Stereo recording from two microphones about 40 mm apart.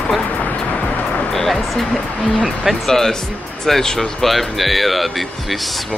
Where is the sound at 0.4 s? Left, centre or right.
Left.